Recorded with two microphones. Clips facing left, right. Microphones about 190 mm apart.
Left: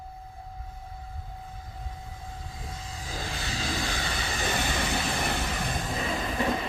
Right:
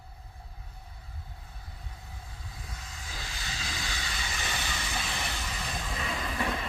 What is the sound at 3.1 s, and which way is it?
Vehicle, 45° left (ahead or behind).